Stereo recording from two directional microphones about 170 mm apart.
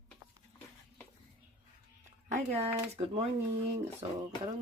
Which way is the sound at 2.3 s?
40° right (ahead or behind).